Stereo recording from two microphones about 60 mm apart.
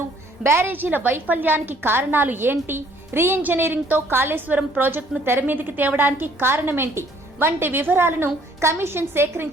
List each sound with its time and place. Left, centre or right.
0.4 s a woman's voice: right